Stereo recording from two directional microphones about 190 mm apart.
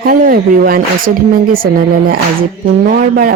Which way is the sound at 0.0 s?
50° right (ahead or behind).